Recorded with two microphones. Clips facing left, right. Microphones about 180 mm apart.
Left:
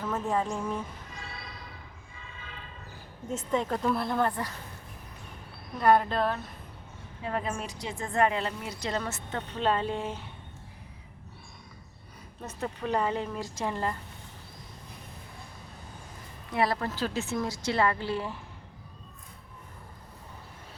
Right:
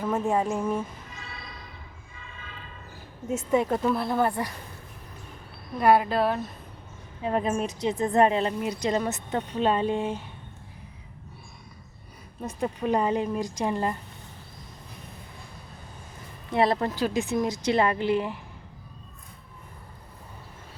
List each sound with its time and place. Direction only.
0.3 s a woman's voice: 10° right (ahead or behind)
3.2 s a woman's voice: 10° right (ahead or behind)
5.8 s a woman's voice: 10° right (ahead or behind)
7.3 s a woman's voice: 25° right (ahead or behind)
12.4 s a woman's voice: 15° right (ahead or behind)
16.5 s a woman's voice: 25° right (ahead or behind)